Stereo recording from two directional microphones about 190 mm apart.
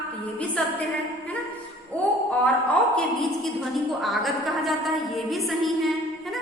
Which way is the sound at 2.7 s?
5° left (ahead or behind).